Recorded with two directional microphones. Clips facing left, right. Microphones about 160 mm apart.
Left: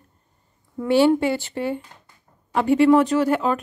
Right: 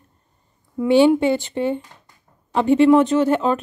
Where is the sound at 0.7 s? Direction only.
15° right (ahead or behind).